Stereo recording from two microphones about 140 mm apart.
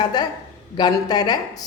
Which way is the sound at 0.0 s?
30° left (ahead or behind).